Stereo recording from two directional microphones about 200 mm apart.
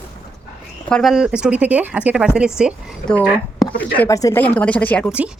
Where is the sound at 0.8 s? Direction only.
Centre (ahead or behind).